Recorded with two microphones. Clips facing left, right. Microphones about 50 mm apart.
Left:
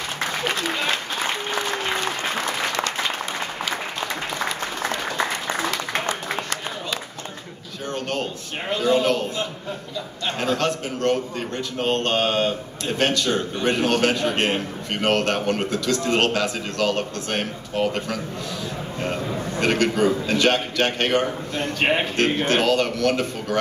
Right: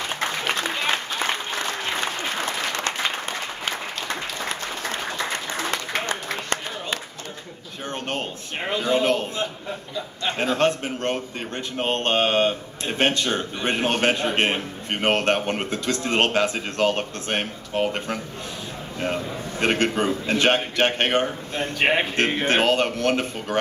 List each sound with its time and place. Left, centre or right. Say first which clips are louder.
5.9 s a sound: left 2 dB; left
7.9 s a sound: left 2 dB; right
10.4 s a man's voice: right 2 dB; right
19.6 s a man's voice: left 2 dB; right
21.7 s a man's voice: right 1 dB; centre
22.1 s a man's voice: left 1 dB; right